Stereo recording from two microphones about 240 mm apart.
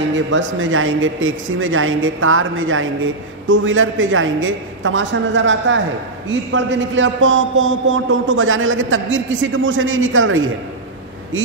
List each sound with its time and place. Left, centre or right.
0.1 s a man's voice: right